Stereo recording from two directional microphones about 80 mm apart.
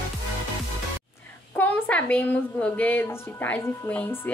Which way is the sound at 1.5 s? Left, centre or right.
Left.